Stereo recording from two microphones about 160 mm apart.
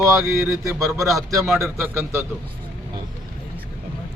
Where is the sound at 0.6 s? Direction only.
20° right (ahead or behind).